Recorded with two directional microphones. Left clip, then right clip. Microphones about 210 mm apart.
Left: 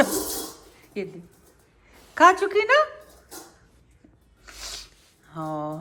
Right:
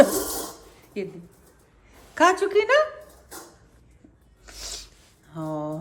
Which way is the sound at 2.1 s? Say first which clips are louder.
Left 2 dB; 10° right (ahead or behind).